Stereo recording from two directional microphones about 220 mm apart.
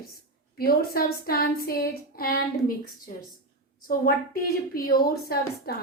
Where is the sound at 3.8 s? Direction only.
40° left (ahead or behind).